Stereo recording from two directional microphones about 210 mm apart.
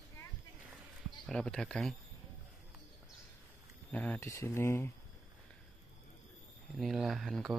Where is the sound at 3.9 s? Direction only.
5° left (ahead or behind).